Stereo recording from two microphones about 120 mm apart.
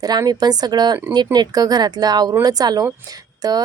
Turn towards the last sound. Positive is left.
turn(degrees=-30)  # may be behind; listen again after turning